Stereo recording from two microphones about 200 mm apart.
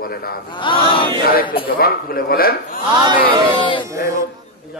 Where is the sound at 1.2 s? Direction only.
45° left (ahead or behind).